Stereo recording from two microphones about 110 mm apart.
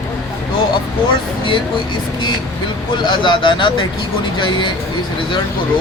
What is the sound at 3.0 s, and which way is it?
Speech, 45° left (ahead or behind).